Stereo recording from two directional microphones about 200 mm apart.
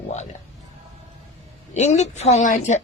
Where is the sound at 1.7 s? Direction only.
35° left (ahead or behind).